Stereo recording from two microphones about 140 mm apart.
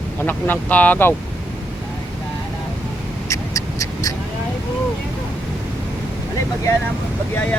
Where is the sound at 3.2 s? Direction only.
25° left (ahead or behind).